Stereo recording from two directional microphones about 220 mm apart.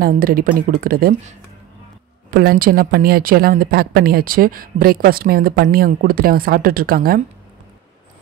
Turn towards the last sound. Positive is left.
turn(degrees=-40)  # may be behind; listen again after turning